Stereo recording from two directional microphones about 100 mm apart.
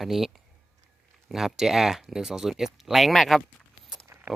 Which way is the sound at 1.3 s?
5° right (ahead or behind).